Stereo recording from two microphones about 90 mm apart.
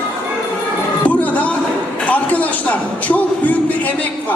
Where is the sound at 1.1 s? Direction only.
15° left (ahead or behind).